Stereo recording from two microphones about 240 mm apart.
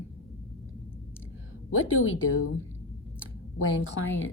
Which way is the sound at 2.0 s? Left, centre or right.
Left.